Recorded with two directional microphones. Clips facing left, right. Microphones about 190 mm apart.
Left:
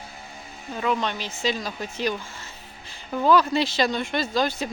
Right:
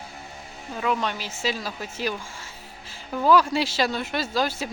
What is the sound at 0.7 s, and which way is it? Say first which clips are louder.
Speech: left 1 dB; 5° right (ahead or behind).